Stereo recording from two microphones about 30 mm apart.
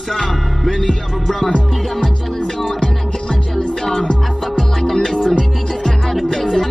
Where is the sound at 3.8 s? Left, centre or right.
Centre.